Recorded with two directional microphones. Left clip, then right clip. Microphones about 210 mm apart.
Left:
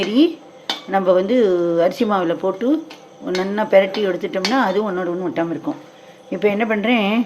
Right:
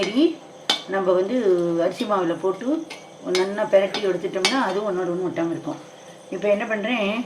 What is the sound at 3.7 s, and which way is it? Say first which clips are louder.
Speech: left 5 dB; 45° left (ahead or behind).